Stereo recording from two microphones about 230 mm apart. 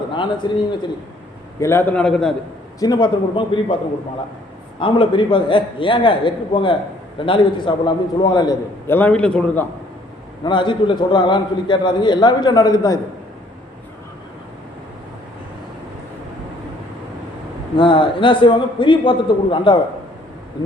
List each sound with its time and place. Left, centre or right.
0.1 s a man's voice: centre
2.8 s a man's voice: centre
4.8 s a man's voice: left; by 9.6 s centre
10.4 s a man's voice: left
17.7 s a man's voice: left